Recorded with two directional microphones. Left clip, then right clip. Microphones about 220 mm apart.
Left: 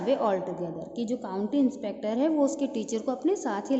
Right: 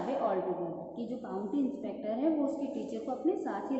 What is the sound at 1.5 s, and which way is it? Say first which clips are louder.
Speech: left 8 dB; 45° left (ahead or behind).